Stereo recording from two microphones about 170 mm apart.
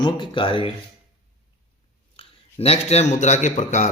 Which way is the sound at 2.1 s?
35° left (ahead or behind).